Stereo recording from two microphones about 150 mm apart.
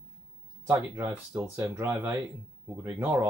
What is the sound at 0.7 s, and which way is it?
Speech, 15° right (ahead or behind).